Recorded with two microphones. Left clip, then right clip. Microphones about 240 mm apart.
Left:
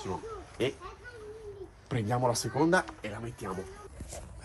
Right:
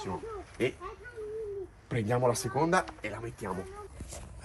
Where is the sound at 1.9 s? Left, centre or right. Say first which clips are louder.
Right 1 dB; centre.